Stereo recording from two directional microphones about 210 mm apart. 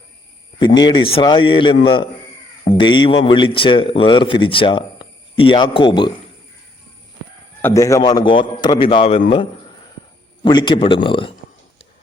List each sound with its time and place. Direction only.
0.6 s speech: 20° left (ahead or behind)
7.6 s speech: 15° left (ahead or behind)